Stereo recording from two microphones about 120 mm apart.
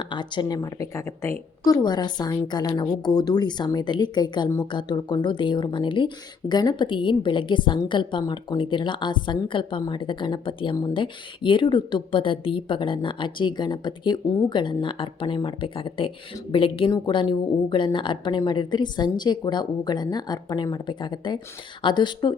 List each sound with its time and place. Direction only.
0.0 s a woman's voice: 40° left (ahead or behind); by 1.3 s 25° left (ahead or behind)
1.6 s a woman's voice: 35° left (ahead or behind)